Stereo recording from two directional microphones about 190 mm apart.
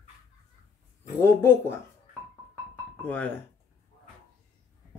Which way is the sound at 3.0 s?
10° left (ahead or behind).